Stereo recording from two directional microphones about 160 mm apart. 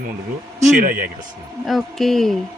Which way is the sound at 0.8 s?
60° right (ahead or behind).